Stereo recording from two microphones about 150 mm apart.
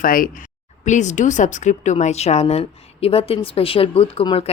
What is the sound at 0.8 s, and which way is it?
Speech, 55° left (ahead or behind).